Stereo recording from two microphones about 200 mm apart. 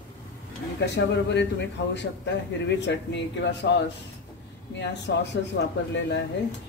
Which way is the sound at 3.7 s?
60° left (ahead or behind).